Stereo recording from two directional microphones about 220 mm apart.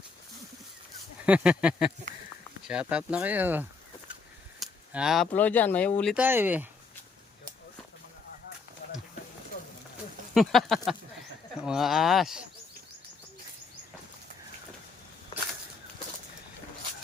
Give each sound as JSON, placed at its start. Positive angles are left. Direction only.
{"t": 1.2, "sound": "speech", "side_deg": -5}
{"t": 6.1, "sound": "speech", "side_deg": -10}
{"t": 10.3, "sound": "speech", "side_deg": 0}